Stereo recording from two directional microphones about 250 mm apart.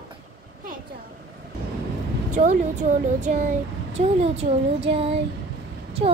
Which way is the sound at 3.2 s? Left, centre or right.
Right.